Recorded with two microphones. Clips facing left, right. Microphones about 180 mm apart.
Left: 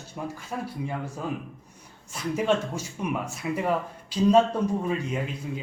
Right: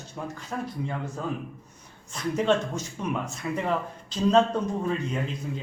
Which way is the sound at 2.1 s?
10° left (ahead or behind).